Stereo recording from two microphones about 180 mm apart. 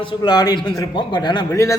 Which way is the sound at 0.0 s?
25° left (ahead or behind).